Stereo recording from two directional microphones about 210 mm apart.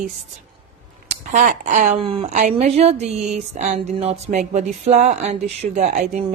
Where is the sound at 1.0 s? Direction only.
35° right (ahead or behind).